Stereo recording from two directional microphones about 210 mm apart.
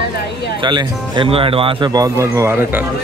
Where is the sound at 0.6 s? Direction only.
20° right (ahead or behind).